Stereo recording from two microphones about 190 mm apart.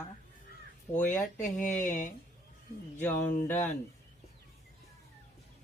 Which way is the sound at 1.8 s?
45° left (ahead or behind).